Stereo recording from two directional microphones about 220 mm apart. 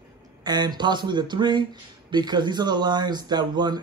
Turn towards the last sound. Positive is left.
turn(degrees=-20)  # may be behind; listen again after turning